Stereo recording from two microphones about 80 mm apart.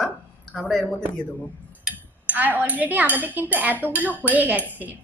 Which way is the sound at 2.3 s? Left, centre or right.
Right.